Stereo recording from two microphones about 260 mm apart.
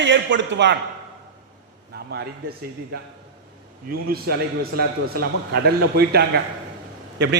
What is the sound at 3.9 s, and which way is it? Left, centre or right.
A man's voice, right.